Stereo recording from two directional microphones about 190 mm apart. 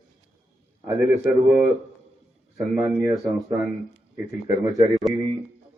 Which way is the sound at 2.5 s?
15° right (ahead or behind).